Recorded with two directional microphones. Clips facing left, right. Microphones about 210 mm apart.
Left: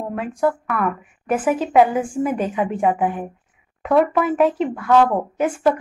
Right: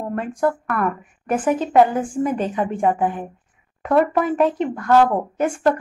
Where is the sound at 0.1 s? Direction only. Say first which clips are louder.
Even; centre (ahead or behind).